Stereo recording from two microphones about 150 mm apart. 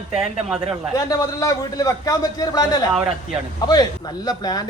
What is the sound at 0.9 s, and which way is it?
Speech, 25° left (ahead or behind).